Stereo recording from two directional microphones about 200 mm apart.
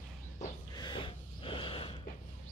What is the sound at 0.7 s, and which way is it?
Snort, 25° left (ahead or behind).